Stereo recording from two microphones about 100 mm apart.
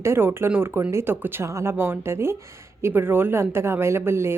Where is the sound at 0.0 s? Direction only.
25° right (ahead or behind).